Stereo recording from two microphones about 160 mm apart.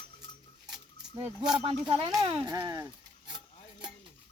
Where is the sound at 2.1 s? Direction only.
20° right (ahead or behind).